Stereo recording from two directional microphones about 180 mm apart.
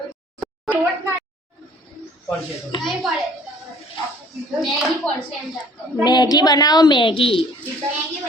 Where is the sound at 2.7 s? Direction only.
30° left (ahead or behind).